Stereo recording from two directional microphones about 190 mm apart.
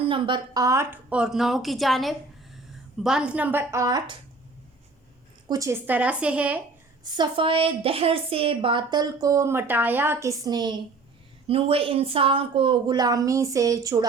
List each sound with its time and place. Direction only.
0.0 s a woman's voice: 25° right (ahead or behind)
5.5 s a woman's voice: 15° right (ahead or behind)
7.0 s a woman's voice: 25° right (ahead or behind)